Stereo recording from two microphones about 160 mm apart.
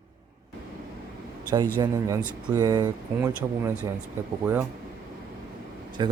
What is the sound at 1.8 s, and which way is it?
Speech, 20° right (ahead or behind).